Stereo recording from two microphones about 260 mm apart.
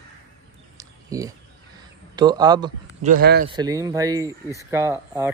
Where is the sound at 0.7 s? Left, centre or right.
Centre.